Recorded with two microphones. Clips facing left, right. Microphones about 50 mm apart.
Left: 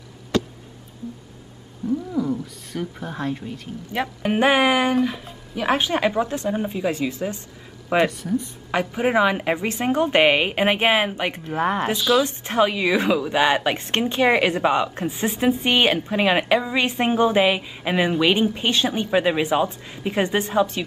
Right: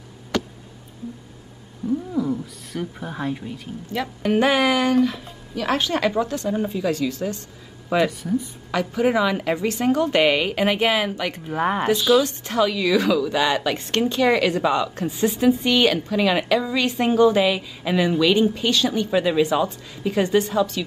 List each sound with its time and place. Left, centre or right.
1.9 s speech: centre
3.9 s a woman's voice: left
4.9 s a woman's voice: centre
8.1 s speech: centre
8.7 s a woman's voice: left
11.4 s speech: centre
12.2 s a woman's voice: left